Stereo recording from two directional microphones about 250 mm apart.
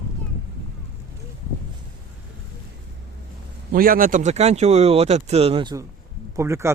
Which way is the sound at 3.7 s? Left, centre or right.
Right.